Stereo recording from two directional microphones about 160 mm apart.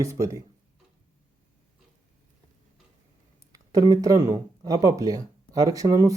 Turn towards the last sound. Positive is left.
turn(degrees=-20)  # may be behind; listen again after turning